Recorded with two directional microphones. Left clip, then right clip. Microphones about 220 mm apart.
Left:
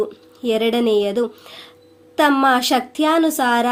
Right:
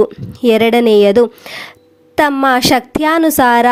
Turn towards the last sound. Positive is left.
turn(degrees=-40)  # may be behind; listen again after turning